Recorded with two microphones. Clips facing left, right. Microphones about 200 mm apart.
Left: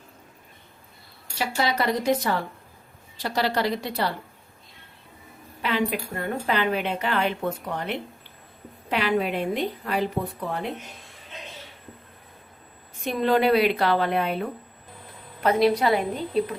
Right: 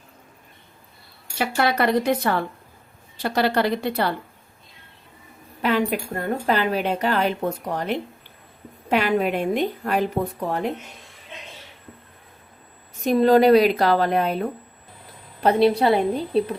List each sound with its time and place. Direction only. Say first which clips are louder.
1.4 s a woman's voice: right 4 dB; 60° right (ahead or behind)
5.6 s a woman's voice: right 4 dB; 45° right (ahead or behind)
13.1 s speech: right 6 dB; 40° right (ahead or behind)
15.4 s speech: right 3 dB; 30° right (ahead or behind)